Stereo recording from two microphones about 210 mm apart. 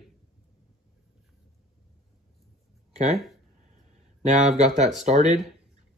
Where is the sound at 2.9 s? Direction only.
30° right (ahead or behind).